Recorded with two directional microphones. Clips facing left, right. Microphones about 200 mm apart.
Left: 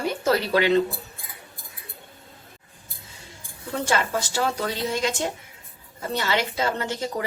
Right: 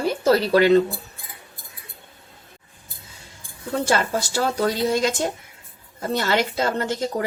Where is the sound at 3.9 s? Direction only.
40° right (ahead or behind).